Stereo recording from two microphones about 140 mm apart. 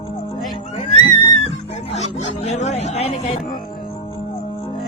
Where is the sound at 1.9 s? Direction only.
50° left (ahead or behind).